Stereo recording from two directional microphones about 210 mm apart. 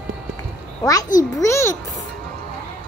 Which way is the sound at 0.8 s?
15° left (ahead or behind).